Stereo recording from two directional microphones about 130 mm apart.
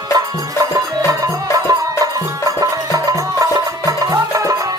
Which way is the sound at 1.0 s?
25° right (ahead or behind).